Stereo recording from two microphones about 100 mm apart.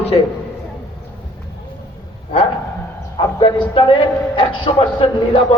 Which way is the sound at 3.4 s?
55° left (ahead or behind).